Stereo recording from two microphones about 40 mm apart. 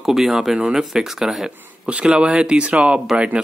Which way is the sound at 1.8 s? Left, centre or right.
Right.